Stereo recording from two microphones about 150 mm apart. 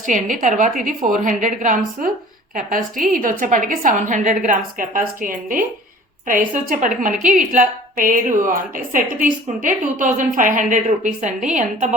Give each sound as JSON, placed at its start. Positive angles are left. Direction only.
{"t": 0.0, "sound": "a woman's voice", "side_deg": -60}